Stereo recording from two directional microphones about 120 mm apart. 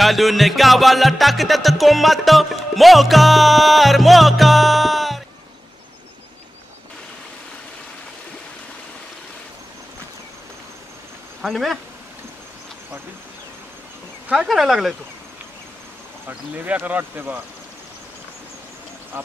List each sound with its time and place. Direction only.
0.0 s music: centre (ahead or behind)
11.4 s music: centre (ahead or behind)
14.3 s music: centre (ahead or behind)
16.3 s speech: 15° right (ahead or behind)
19.1 s speech: 15° right (ahead or behind)